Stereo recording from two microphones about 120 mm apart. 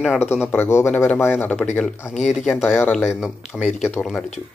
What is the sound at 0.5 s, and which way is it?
Speech, 20° left (ahead or behind).